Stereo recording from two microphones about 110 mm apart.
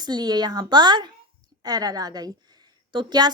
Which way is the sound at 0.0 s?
40° right (ahead or behind).